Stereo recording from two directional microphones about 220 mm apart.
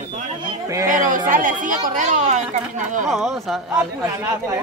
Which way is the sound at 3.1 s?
Centre (ahead or behind).